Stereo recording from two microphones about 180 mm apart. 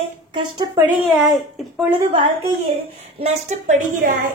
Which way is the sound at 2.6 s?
35° right (ahead or behind).